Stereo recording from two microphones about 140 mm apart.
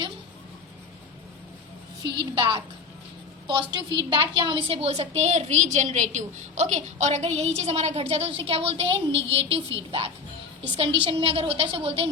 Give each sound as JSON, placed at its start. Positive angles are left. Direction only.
{"t": 2.1, "sound": "a woman's voice", "side_deg": -35}